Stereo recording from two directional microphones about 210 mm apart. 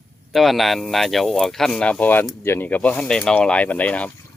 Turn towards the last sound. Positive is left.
turn(degrees=5)  # may be behind; listen again after turning